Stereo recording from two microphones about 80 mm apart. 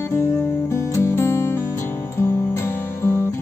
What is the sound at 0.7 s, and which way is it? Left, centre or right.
Music, left.